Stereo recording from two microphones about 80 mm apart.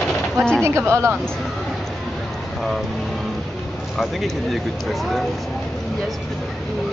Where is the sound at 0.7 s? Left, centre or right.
Right.